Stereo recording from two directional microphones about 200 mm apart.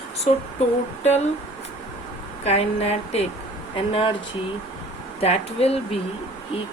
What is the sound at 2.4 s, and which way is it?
Speech, 30° left (ahead or behind).